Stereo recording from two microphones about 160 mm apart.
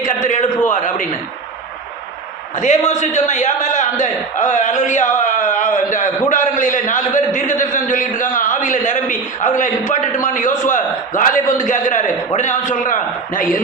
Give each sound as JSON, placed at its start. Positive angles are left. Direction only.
{"t": 0.0, "sound": "a man's voice", "side_deg": 50}
{"t": 2.6, "sound": "a man's voice", "side_deg": 50}